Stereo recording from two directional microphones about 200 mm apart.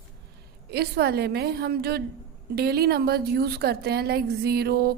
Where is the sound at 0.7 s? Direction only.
55° right (ahead or behind).